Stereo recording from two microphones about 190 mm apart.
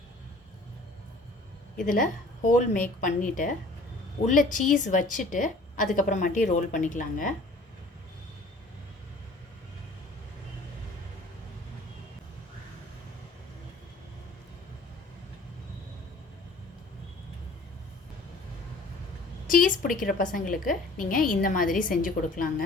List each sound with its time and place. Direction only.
1.7 s a woman's voice: 45° left (ahead or behind)
19.5 s a sound: 45° left (ahead or behind)
20.3 s a woman's voice: 45° left (ahead or behind)